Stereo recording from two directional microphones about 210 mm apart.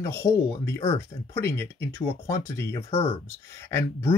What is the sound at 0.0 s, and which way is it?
Speech, 10° left (ahead or behind).